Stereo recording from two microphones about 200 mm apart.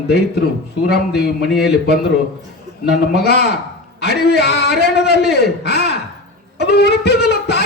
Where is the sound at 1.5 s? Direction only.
Centre (ahead or behind).